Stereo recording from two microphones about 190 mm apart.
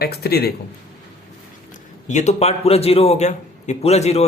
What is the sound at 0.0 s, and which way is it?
Speech, 55° left (ahead or behind).